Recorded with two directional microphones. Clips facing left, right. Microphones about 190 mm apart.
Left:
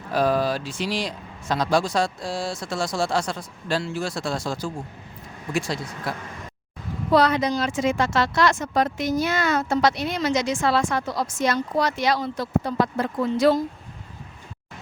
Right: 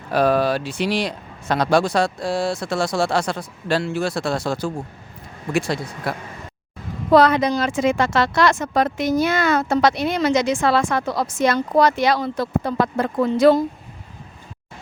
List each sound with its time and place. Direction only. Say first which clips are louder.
0.1 s speech: right 4 dB; 65° right (ahead or behind)